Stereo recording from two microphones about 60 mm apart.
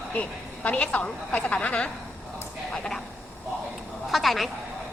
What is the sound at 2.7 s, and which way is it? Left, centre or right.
Speech, centre.